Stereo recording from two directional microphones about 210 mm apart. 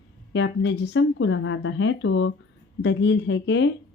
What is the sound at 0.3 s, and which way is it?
Speech, 55° left (ahead or behind).